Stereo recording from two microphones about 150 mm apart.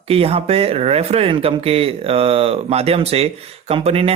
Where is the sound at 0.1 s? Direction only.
40° right (ahead or behind).